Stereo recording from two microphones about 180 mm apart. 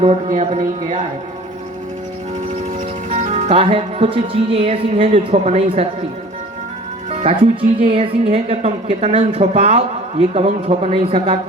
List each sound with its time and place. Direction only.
0.0 s speech: 35° right (ahead or behind)
3.1 s speech: 40° right (ahead or behind)
7.1 s speech: 35° right (ahead or behind)